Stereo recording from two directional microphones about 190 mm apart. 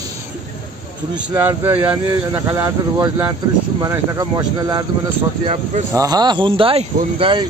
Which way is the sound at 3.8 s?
20° right (ahead or behind).